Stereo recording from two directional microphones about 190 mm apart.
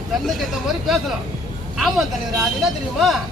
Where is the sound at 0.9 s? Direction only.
Centre (ahead or behind).